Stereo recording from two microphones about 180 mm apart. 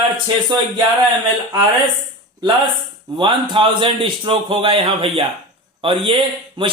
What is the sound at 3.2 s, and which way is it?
A man's voice, 30° right (ahead or behind).